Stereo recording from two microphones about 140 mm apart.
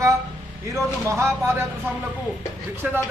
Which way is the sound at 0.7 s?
20° right (ahead or behind).